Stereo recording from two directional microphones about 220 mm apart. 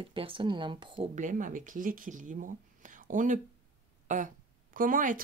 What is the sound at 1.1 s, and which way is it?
Speech, 35° right (ahead or behind).